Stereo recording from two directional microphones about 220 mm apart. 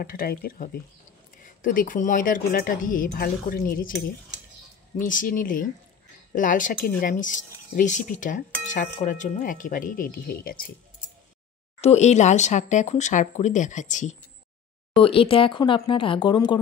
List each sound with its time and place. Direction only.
0.0 s speech: 40° left (ahead or behind)
4.9 s speech: 35° left (ahead or behind)
11.8 s speech: 30° left (ahead or behind)